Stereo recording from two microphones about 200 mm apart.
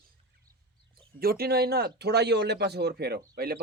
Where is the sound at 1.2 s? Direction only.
50° right (ahead or behind).